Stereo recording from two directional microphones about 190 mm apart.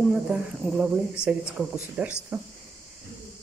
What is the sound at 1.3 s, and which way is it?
Speech, 10° right (ahead or behind).